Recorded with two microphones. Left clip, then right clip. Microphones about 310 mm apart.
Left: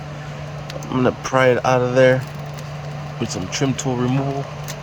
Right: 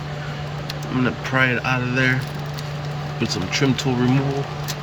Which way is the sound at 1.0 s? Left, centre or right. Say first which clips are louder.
Left 4 dB; left.